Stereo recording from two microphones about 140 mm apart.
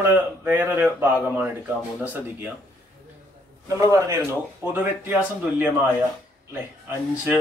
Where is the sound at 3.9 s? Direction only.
20° right (ahead or behind).